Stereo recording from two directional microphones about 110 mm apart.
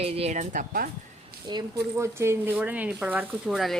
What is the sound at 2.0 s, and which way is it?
Speech, 25° right (ahead or behind).